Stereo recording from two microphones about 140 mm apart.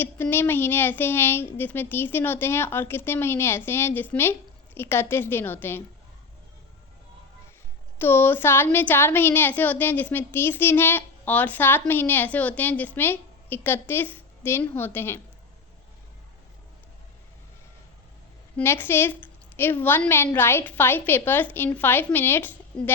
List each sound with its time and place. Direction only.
0.0 s a woman's voice: 15° left (ahead or behind)
7.9 s a woman's voice: 15° left (ahead or behind)
18.5 s a woman's voice: 15° left (ahead or behind)